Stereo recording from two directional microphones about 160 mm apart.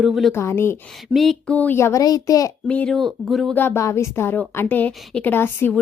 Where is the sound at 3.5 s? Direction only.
10° left (ahead or behind).